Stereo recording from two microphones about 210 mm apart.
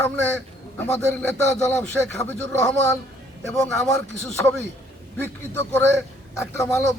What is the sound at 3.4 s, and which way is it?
Speech, centre (ahead or behind).